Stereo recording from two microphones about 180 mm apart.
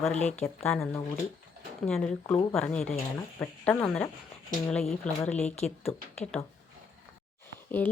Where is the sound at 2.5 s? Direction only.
5° left (ahead or behind).